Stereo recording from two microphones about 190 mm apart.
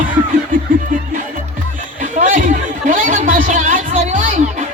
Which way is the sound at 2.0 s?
45° right (ahead or behind).